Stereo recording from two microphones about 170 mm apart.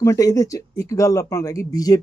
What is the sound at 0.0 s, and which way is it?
Speech, 20° left (ahead or behind).